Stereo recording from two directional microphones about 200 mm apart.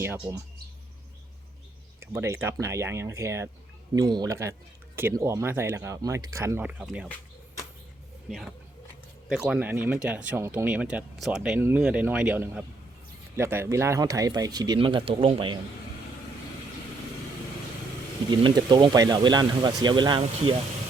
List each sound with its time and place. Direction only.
0.0 s speech: 15° right (ahead or behind)
2.0 s speech: 15° right (ahead or behind)
8.3 s speech: centre (ahead or behind); by 15.5 s 25° right (ahead or behind)
18.3 s speech: 20° right (ahead or behind)